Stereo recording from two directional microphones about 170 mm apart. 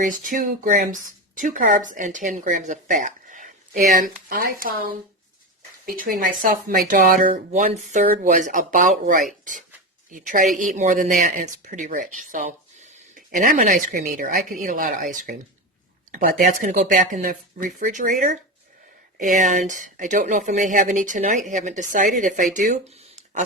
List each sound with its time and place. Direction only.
0.0 s speech: 50° right (ahead or behind)